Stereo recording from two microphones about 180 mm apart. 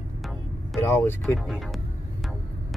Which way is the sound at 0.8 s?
15° left (ahead or behind).